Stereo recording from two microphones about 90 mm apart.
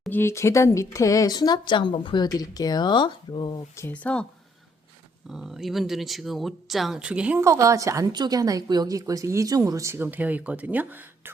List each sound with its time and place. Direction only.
0.1 s speech: 30° left (ahead or behind); by 3.6 s 60° left (ahead or behind)
4.0 s speech: 10° left (ahead or behind)
5.3 s speech: 5° right (ahead or behind)
7.0 s a woman's voice: 10° right (ahead or behind)
7.3 s speech: 30° right (ahead or behind)
8.1 s speech: 50° right (ahead or behind)
9.9 s speech: 20° right (ahead or behind)